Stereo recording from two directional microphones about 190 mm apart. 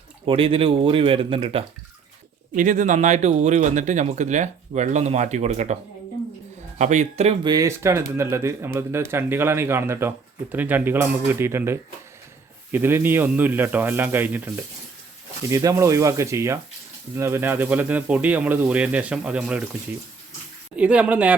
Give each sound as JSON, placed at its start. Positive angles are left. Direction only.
{"t": 0.3, "sound": "speech", "side_deg": -30}
{"t": 2.6, "sound": "speech", "side_deg": -40}
{"t": 6.7, "sound": "speech", "side_deg": -40}
{"t": 7.4, "sound": "speech", "side_deg": -20}
{"t": 20.7, "sound": "speech", "side_deg": -5}